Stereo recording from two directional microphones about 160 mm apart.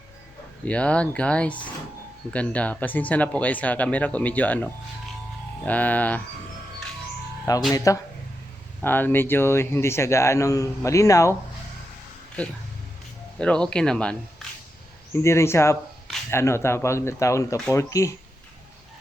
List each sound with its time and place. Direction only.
0.6 s a man's voice: 10° left (ahead or behind)
7.5 s a man's voice: 20° left (ahead or behind)
13.4 s speech: 5° left (ahead or behind)
15.1 s a man's voice: 15° left (ahead or behind)